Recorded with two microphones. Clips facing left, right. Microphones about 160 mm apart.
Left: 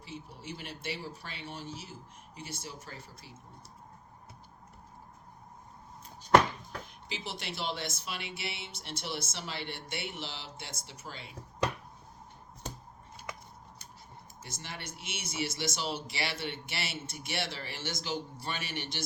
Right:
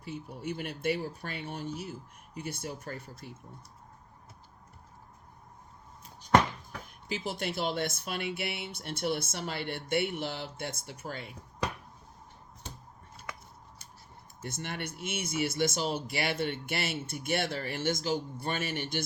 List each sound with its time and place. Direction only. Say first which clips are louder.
0.0 s speech: right 6 dB; 55° right (ahead or behind)
7.1 s speech: right 7 dB; 50° right (ahead or behind)
14.4 s speech: right 7 dB; 60° right (ahead or behind)